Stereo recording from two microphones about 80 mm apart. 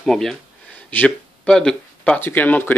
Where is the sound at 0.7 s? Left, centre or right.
Centre.